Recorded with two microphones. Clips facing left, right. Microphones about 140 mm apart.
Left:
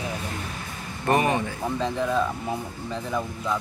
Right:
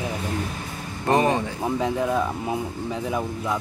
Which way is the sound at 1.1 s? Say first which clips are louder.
Right 2 dB; 20° right (ahead or behind).